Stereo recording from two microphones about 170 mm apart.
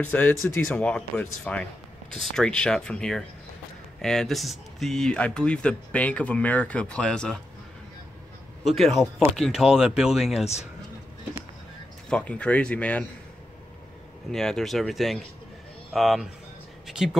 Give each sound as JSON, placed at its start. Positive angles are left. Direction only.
{"t": 0.0, "sound": "speech", "side_deg": 10}
{"t": 8.6, "sound": "speech", "side_deg": 0}
{"t": 10.4, "sound": "speech", "side_deg": 40}
{"t": 12.1, "sound": "speech", "side_deg": 5}
{"t": 14.3, "sound": "speech", "side_deg": 0}